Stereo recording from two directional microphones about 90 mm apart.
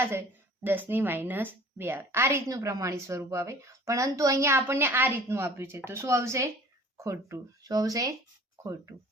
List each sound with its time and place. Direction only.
0.0 s a woman's voice: 25° right (ahead or behind)
2.5 s a woman's voice: 35° right (ahead or behind)